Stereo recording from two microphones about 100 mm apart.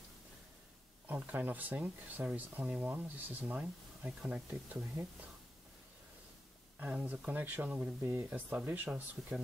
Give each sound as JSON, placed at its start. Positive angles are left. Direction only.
{"t": 1.0, "sound": "speech", "side_deg": -20}
{"t": 6.8, "sound": "speech", "side_deg": -15}